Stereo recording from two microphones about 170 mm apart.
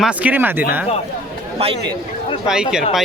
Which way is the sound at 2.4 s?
5° right (ahead or behind).